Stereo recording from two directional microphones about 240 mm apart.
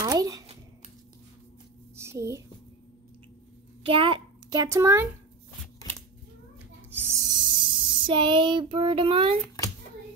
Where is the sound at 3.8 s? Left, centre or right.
Right.